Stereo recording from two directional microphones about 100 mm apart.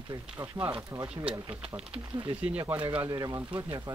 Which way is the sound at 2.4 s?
15° right (ahead or behind).